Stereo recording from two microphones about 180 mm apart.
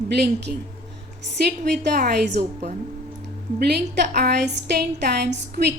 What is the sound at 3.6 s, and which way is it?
A woman's voice, 65° right (ahead or behind).